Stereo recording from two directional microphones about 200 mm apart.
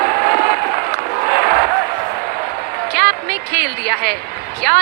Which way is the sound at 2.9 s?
50° right (ahead or behind).